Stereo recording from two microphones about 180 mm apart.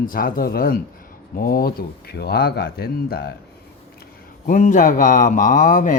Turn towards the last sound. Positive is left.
turn(degrees=45)  # may be behind; listen again after turning